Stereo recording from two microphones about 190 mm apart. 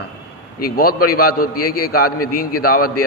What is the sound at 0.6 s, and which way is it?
A man's voice, 50° left (ahead or behind).